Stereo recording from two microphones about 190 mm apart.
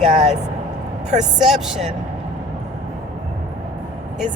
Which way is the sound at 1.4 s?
Centre (ahead or behind).